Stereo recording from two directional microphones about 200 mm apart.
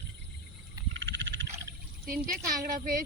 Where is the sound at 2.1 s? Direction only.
45° right (ahead or behind).